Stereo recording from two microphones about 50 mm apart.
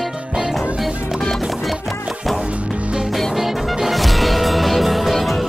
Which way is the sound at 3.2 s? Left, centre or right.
Centre.